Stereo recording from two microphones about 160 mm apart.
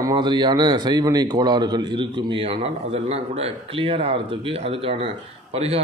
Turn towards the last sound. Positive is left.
turn(degrees=-40)  # may be behind; listen again after turning